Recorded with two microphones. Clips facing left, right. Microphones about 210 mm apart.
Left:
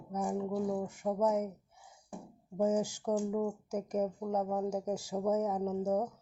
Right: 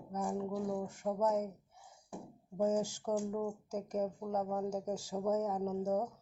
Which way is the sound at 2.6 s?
15° left (ahead or behind).